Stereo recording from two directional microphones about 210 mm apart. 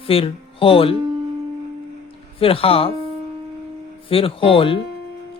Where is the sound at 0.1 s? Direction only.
25° left (ahead or behind).